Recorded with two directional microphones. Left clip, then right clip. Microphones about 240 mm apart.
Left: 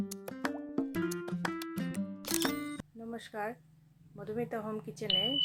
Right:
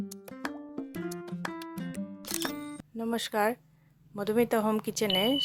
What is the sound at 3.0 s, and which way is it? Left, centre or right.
Speech, right.